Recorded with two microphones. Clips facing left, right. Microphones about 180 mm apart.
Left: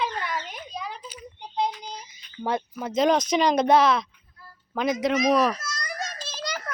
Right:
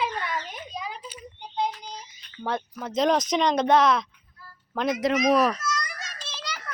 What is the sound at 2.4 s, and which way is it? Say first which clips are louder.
Speech: left 2 dB; 10° left (ahead or behind).